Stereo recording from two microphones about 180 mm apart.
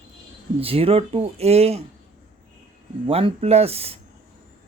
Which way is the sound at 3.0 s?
30° right (ahead or behind).